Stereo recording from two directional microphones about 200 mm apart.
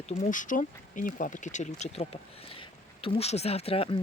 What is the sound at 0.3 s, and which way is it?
Speech, 40° left (ahead or behind).